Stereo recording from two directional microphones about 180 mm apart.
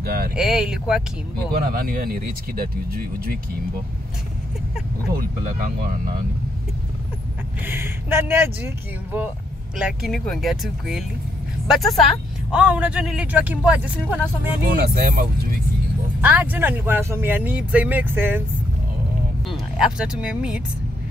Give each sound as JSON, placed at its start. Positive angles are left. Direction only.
{"t": 0.0, "sound": "vehicle", "side_deg": -55}
{"t": 0.4, "sound": "speech", "side_deg": -5}
{"t": 1.5, "sound": "speech", "side_deg": -55}
{"t": 5.1, "sound": "speech", "side_deg": -55}
{"t": 7.6, "sound": "speech", "side_deg": -10}
{"t": 14.7, "sound": "speech", "side_deg": -55}
{"t": 16.2, "sound": "speech", "side_deg": -10}
{"t": 19.5, "sound": "speech", "side_deg": -5}